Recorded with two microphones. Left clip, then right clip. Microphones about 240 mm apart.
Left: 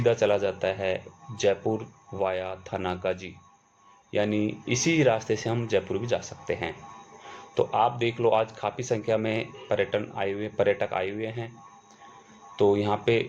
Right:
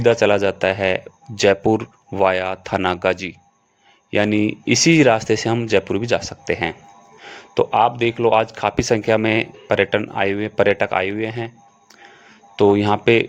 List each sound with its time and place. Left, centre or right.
0.0 s speech: right
12.5 s speech: right